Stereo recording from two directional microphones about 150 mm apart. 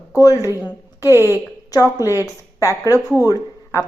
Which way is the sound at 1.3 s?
20° left (ahead or behind).